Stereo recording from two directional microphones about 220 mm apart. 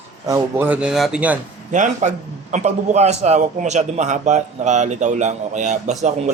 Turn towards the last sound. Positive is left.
turn(degrees=-30)  # may be behind; listen again after turning